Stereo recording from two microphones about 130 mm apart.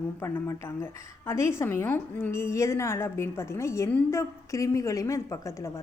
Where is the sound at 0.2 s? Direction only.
20° left (ahead or behind).